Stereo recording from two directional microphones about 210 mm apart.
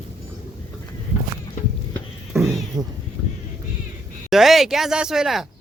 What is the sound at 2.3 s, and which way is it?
Cat, centre (ahead or behind).